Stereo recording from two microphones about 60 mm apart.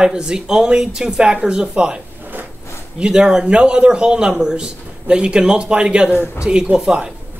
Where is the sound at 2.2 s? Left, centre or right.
Right.